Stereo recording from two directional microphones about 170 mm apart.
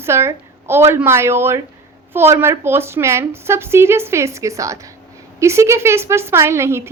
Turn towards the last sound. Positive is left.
turn(degrees=-15)  # may be behind; listen again after turning